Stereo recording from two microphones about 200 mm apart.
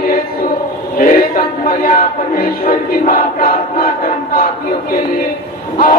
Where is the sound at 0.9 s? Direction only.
45° left (ahead or behind).